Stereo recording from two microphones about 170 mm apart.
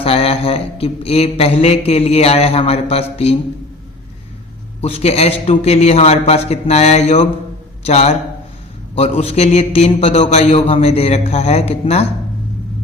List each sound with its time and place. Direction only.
0.0 s a sound: 35° left (ahead or behind)
2.9 s a man's voice: 35° left (ahead or behind)
4.8 s a man's voice: 35° left (ahead or behind)